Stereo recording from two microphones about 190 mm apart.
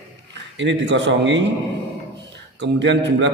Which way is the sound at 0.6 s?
70° right (ahead or behind).